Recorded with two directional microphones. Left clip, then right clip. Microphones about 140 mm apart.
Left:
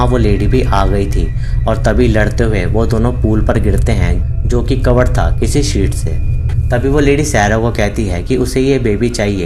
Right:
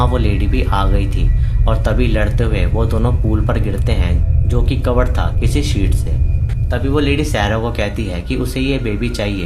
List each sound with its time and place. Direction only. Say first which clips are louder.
0.0 s speech: left 5 dB; 30° left (ahead or behind)